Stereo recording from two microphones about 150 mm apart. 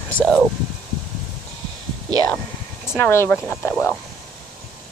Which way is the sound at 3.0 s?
15° left (ahead or behind).